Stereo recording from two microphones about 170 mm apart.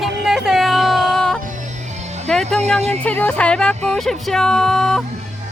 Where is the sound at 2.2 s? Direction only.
5° left (ahead or behind).